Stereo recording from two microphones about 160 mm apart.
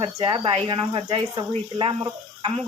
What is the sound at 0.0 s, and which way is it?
Speech, 30° right (ahead or behind).